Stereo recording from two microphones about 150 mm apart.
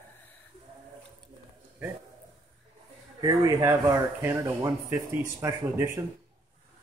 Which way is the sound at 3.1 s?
25° right (ahead or behind).